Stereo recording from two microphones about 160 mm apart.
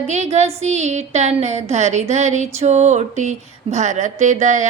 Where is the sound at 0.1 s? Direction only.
45° right (ahead or behind).